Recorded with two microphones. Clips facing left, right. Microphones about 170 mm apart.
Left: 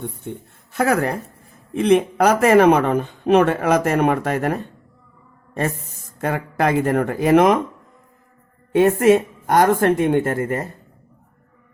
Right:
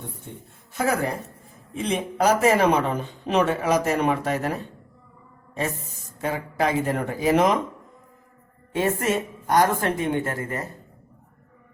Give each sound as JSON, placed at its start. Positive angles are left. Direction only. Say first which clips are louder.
{"t": 0.7, "sound": "speech", "louder": "left 5 dB", "side_deg": 65}
{"t": 6.1, "sound": "speech", "louder": "left 4 dB", "side_deg": 60}
{"t": 8.7, "sound": "speech", "louder": "left 9 dB", "side_deg": 60}